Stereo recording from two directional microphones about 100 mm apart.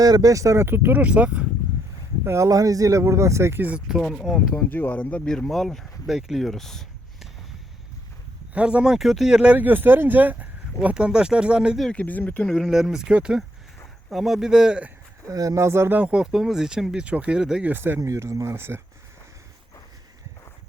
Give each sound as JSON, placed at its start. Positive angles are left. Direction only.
{"t": 0.0, "sound": "speech", "side_deg": -40}
{"t": 2.2, "sound": "speech", "side_deg": -30}
{"t": 3.7, "sound": "speech", "side_deg": -10}
{"t": 4.5, "sound": "speech", "side_deg": 20}
{"t": 8.5, "sound": "speech", "side_deg": -10}
{"t": 11.9, "sound": "speech", "side_deg": 15}
{"t": 15.3, "sound": "speech", "side_deg": -35}
{"t": 17.7, "sound": "speech", "side_deg": -20}